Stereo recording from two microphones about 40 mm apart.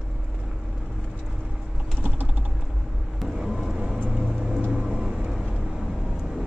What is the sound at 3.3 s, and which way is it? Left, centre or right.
Vehicle, centre.